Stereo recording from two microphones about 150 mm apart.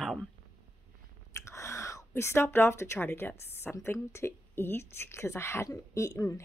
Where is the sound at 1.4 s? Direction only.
20° left (ahead or behind).